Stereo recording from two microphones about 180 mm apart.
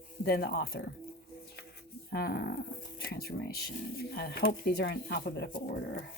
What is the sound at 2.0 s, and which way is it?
Speech, 60° left (ahead or behind).